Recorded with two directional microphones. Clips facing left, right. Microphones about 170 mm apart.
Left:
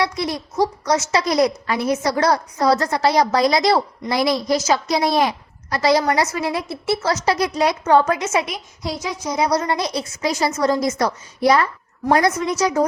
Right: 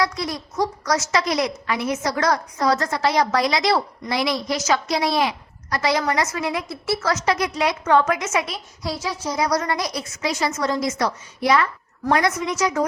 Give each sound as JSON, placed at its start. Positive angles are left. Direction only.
{"t": 0.0, "sound": "a woman's voice", "side_deg": 25}
{"t": 5.7, "sound": "a woman's voice", "side_deg": 35}
{"t": 8.4, "sound": "a child's voice", "side_deg": 15}